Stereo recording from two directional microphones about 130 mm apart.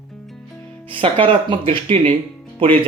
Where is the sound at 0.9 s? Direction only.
45° right (ahead or behind).